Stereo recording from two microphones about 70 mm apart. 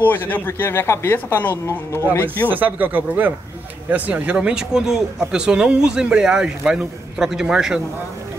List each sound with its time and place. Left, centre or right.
0.0 s speech: left
2.4 s a man's voice: right; by 7.8 s centre